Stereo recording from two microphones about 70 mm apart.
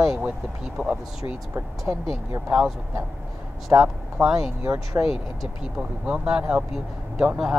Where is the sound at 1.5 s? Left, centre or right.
Right.